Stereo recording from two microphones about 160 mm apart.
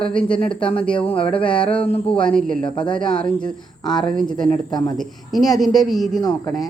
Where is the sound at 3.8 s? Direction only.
25° left (ahead or behind).